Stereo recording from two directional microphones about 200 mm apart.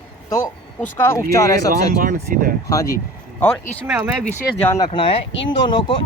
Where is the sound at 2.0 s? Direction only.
45° right (ahead or behind).